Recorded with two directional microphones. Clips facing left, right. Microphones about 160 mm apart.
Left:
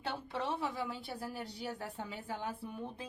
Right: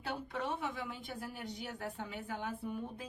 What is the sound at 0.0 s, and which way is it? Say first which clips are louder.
Speech: left 1 dB; 30° left (ahead or behind).